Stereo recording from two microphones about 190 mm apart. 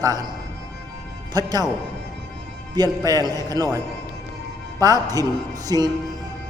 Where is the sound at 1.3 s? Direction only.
20° right (ahead or behind).